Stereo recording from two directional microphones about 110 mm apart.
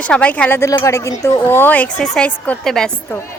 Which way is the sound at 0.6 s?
25° left (ahead or behind).